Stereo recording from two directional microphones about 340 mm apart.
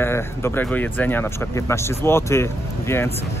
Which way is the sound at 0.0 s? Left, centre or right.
Centre.